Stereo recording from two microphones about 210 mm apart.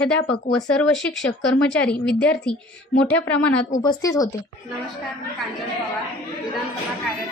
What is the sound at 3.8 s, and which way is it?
Speech, 15° left (ahead or behind).